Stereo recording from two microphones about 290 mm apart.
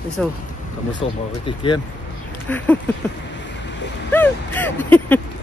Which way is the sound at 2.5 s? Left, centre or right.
Centre.